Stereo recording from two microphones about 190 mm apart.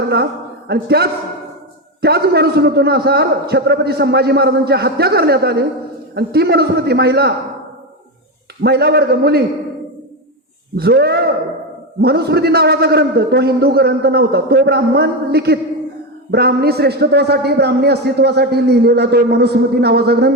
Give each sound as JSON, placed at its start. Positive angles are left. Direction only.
{"t": 0.7, "sound": "a man's voice", "side_deg": -55}
{"t": 8.6, "sound": "a man's voice", "side_deg": -60}
{"t": 10.8, "sound": "a man's voice", "side_deg": -55}